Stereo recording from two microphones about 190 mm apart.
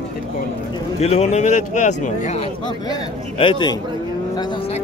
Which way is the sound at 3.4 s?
25° left (ahead or behind).